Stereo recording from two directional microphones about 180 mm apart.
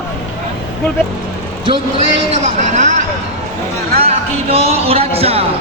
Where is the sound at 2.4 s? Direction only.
40° right (ahead or behind).